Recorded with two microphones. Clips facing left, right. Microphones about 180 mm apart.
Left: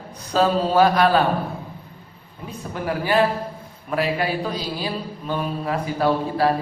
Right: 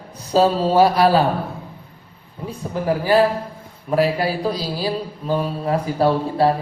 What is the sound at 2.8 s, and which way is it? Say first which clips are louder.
Mantra: right 4 dB; 35° right (ahead or behind).